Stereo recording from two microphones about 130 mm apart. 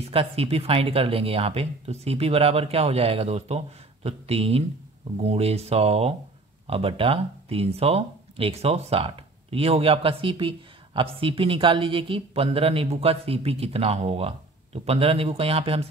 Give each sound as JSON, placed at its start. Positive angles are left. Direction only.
{"t": 0.0, "sound": "speech", "side_deg": -50}